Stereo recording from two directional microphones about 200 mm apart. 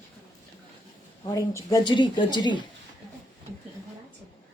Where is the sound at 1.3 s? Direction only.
20° left (ahead or behind).